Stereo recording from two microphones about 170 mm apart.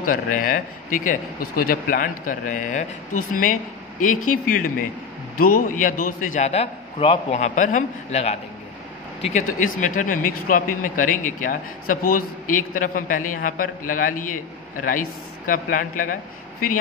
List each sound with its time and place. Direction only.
0.0 s a man's voice: 55° left (ahead or behind)